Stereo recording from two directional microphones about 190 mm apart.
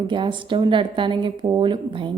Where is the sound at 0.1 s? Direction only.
25° right (ahead or behind).